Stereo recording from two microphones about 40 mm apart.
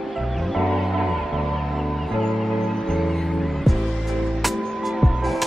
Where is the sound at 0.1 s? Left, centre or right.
Centre.